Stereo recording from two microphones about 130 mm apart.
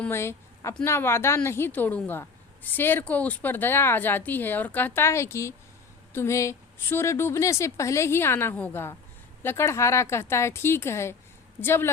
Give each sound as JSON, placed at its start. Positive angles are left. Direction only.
{"t": 0.1, "sound": "a woman's voice", "side_deg": 20}